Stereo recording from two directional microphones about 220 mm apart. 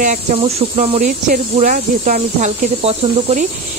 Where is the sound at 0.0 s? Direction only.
35° right (ahead or behind).